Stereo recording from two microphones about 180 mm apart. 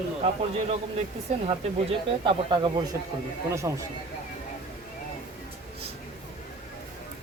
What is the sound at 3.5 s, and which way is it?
Speech, 15° right (ahead or behind).